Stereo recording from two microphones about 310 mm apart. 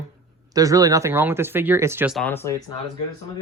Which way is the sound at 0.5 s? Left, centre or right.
Centre.